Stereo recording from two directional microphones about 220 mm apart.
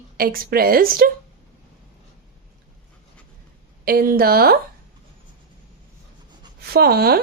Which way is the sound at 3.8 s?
40° right (ahead or behind).